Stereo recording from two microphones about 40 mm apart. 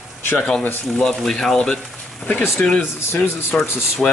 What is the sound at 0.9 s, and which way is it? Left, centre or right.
Speech, centre.